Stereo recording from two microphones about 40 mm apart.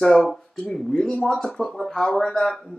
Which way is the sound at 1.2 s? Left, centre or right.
Centre.